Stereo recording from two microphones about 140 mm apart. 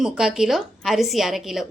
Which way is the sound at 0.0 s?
5° right (ahead or behind).